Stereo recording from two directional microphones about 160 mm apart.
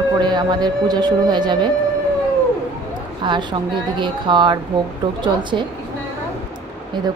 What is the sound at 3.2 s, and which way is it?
A woman's voice, 30° right (ahead or behind).